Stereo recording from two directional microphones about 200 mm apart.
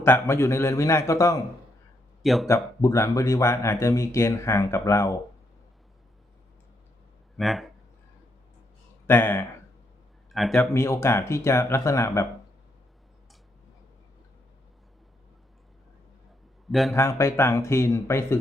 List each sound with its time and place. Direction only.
0.0 s speech: 10° left (ahead or behind)
2.2 s speech: centre (ahead or behind)
2.5 s speech: 15° left (ahead or behind)
7.3 s speech: centre (ahead or behind)
9.0 s speech: 10° left (ahead or behind)
10.6 s speech: 15° left (ahead or behind)
16.9 s speech: 15° left (ahead or behind)